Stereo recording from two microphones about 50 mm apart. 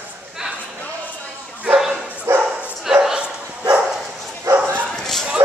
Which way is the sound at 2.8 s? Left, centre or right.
Centre.